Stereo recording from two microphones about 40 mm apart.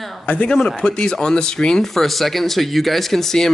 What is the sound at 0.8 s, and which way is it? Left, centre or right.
Speech, left.